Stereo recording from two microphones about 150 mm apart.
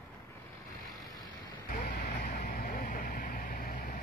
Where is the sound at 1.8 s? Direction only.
65° left (ahead or behind).